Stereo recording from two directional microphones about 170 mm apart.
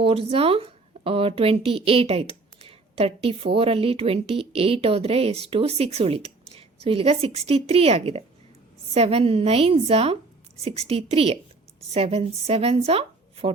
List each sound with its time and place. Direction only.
0.0 s speech: 35° right (ahead or behind)